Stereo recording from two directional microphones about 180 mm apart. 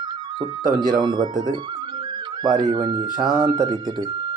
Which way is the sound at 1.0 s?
25° right (ahead or behind).